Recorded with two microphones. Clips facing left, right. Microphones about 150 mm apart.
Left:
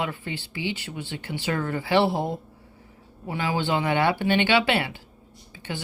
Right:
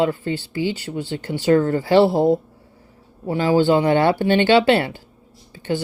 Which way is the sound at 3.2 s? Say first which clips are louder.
Right 10 dB; 40° right (ahead or behind).